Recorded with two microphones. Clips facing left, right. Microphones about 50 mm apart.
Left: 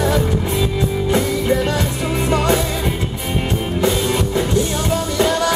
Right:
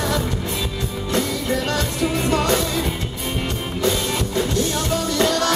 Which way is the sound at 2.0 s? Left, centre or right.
Centre.